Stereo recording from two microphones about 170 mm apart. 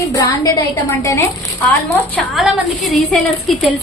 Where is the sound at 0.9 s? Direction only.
20° left (ahead or behind).